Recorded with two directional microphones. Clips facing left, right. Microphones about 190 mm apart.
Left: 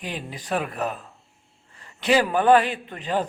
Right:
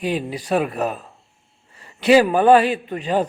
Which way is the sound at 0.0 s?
15° right (ahead or behind).